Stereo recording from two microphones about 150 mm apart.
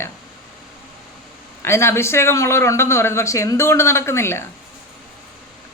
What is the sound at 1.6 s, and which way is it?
A man's voice, 15° left (ahead or behind).